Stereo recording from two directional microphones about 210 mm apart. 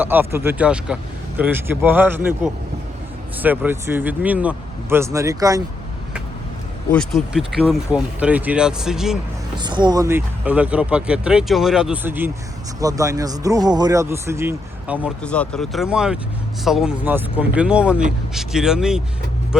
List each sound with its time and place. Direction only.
0.0 s speech: 10° right (ahead or behind)
6.9 s speech: centre (ahead or behind)
9.6 s speech: 20° right (ahead or behind)
15.2 s speech: 5° left (ahead or behind)